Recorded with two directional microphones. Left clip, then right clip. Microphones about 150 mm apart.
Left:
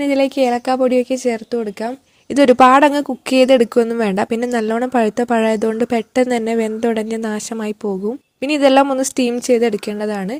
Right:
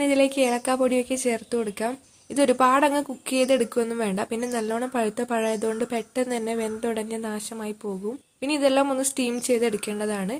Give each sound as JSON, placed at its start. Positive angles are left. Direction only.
{"t": 0.0, "sound": "a woman's voice", "side_deg": 40}
{"t": 2.3, "sound": "speech", "side_deg": 45}